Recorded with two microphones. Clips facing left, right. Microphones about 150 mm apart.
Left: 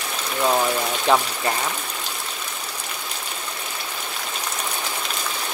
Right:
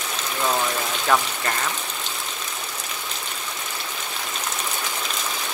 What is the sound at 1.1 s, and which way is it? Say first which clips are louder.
Speech: left 2 dB; 20° left (ahead or behind).